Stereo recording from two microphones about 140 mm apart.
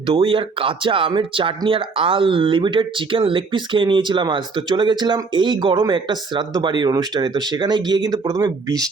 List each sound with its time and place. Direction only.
0.2 s speech: 40° right (ahead or behind)